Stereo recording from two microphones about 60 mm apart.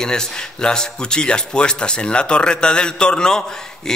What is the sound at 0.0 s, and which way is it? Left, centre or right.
A man's voice, centre.